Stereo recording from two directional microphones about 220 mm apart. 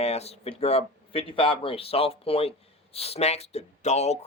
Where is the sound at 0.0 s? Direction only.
30° left (ahead or behind).